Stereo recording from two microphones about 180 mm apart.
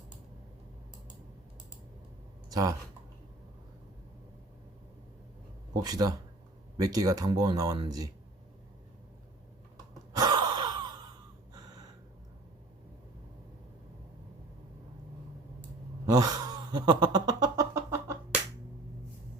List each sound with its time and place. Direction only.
2.5 s speech: 20° right (ahead or behind)
5.7 s speech: 20° right (ahead or behind)
10.1 s gasp: 20° right (ahead or behind)
16.0 s a sound: 20° right (ahead or behind)